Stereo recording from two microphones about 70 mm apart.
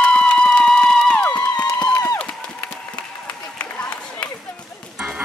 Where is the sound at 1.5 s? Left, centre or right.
Left.